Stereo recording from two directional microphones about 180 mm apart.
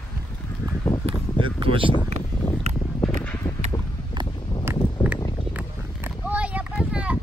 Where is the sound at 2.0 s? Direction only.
40° right (ahead or behind).